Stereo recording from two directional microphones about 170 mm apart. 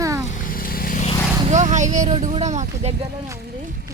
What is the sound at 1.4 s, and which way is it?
Speech, 45° right (ahead or behind).